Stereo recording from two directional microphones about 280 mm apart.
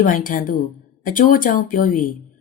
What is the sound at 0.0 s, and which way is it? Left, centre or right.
Speech, left.